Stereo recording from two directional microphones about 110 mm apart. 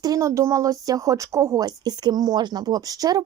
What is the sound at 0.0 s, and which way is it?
A woman's voice, 30° right (ahead or behind).